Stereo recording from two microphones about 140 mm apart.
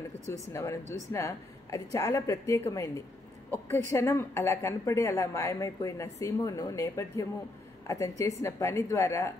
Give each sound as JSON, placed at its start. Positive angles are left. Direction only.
{"t": 0.3, "sound": "a woman's voice", "side_deg": 20}